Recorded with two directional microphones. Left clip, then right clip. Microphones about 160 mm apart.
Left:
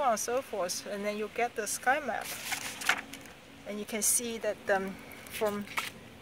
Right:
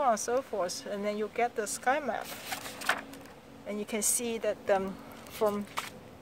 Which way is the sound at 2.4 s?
55° right (ahead or behind).